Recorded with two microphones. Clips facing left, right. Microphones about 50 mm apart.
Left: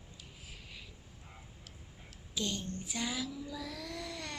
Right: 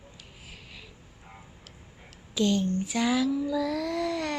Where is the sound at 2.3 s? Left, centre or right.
Right.